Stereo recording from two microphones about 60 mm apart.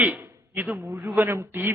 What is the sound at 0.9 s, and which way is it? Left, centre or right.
Speech, right.